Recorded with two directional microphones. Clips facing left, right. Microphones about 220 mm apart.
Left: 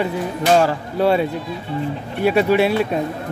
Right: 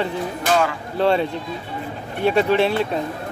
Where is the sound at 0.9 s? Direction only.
10° left (ahead or behind).